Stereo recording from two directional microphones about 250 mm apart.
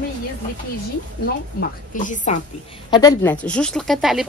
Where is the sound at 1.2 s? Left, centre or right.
Left.